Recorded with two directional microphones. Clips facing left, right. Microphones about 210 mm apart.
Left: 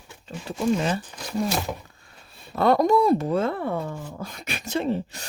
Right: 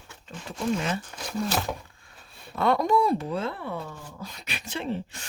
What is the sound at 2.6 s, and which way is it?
Speech, 40° left (ahead or behind).